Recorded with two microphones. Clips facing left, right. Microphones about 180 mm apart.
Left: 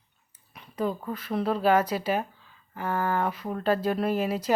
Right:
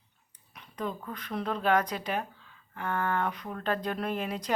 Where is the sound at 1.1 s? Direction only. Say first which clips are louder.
Left 6 dB; 5° left (ahead or behind).